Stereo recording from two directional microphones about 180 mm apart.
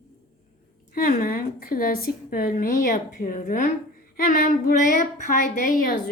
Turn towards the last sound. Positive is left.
turn(degrees=50)  # may be behind; listen again after turning